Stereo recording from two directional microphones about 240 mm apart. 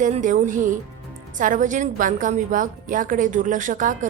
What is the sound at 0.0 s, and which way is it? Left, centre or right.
A woman's voice, right.